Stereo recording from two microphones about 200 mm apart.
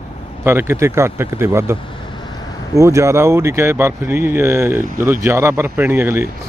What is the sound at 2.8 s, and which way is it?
Speech, 15° right (ahead or behind).